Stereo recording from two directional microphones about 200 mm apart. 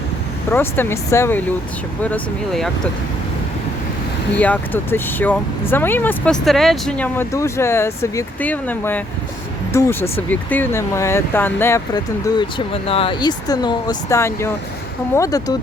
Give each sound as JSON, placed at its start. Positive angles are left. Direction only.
{"t": 0.5, "sound": "speech", "side_deg": 10}
{"t": 4.4, "sound": "speech", "side_deg": 5}